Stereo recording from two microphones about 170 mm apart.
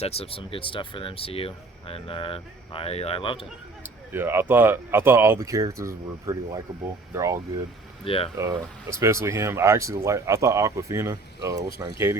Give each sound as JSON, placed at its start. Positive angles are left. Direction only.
{"t": 0.0, "sound": "speech", "side_deg": 35}
{"t": 4.1, "sound": "speech", "side_deg": -15}
{"t": 8.0, "sound": "speech", "side_deg": 35}
{"t": 8.4, "sound": "speech", "side_deg": -15}